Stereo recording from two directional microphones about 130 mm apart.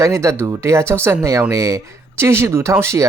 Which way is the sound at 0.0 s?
25° right (ahead or behind).